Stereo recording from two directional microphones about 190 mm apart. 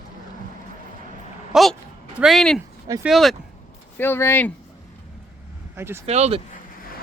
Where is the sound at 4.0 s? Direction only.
10° left (ahead or behind).